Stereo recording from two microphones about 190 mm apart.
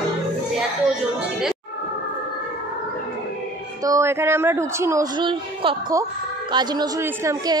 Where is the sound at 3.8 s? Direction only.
15° right (ahead or behind).